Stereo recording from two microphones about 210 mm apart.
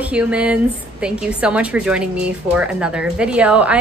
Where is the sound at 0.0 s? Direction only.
5° right (ahead or behind).